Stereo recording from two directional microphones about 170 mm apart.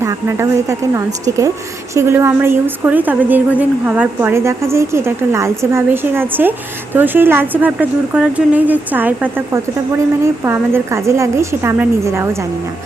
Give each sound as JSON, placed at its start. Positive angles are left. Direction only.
{"t": 0.0, "sound": "a woman's voice", "side_deg": -15}